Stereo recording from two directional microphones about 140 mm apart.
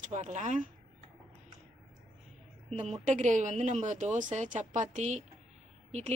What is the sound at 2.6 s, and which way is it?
Speech, 55° right (ahead or behind).